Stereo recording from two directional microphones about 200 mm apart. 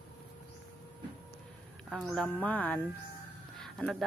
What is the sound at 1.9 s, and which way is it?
Speech, centre (ahead or behind).